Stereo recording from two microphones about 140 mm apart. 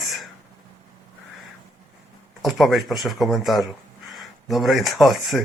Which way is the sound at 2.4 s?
Centre (ahead or behind).